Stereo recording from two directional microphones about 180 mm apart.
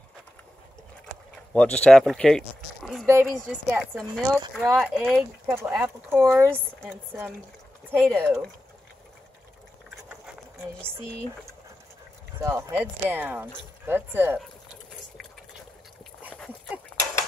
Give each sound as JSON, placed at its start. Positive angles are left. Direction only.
{"t": 1.5, "sound": "speech", "side_deg": 5}
{"t": 2.8, "sound": "a sound", "side_deg": 0}
{"t": 3.3, "sound": "speech", "side_deg": -5}
{"t": 4.6, "sound": "speech", "side_deg": -15}
{"t": 4.9, "sound": "speech", "side_deg": 0}
{"t": 5.5, "sound": "speech", "side_deg": -10}
{"t": 7.9, "sound": "speech", "side_deg": -10}
{"t": 10.8, "sound": "speech", "side_deg": 5}
{"t": 12.4, "sound": "speech", "side_deg": -15}